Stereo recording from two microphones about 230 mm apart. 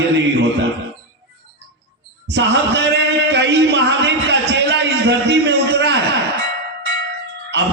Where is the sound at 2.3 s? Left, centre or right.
Right.